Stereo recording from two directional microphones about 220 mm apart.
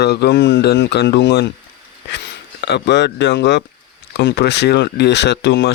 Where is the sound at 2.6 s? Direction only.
50° left (ahead or behind).